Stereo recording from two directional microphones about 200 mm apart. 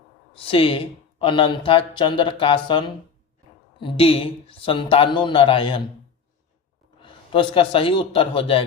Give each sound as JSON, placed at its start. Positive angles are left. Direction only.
{"t": 0.3, "sound": "speech", "side_deg": 25}
{"t": 7.0, "sound": "a man's voice", "side_deg": 25}